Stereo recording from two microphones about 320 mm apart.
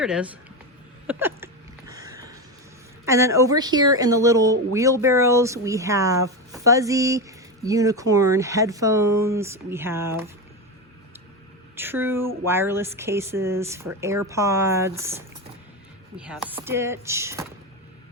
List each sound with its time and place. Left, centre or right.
0.0 s speech: centre
1.0 s hiccup: centre
3.1 s speech: centre
11.8 s speech: centre